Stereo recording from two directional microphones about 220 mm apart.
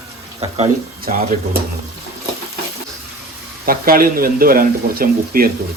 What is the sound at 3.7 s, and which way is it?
Speech, 40° right (ahead or behind).